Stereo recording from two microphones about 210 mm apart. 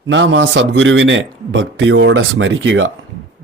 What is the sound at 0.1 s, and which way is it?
A man's voice, 65° right (ahead or behind).